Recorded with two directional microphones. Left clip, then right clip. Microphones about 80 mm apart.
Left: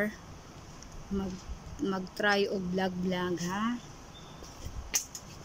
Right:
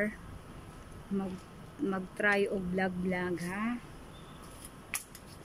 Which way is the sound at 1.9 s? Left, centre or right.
Centre.